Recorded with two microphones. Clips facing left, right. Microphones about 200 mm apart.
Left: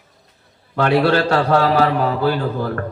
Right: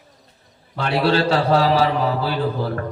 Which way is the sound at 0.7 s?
55° left (ahead or behind).